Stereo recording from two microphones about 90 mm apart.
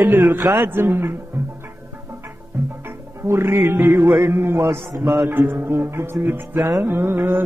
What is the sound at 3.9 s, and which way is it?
A man's voice, 40° right (ahead or behind).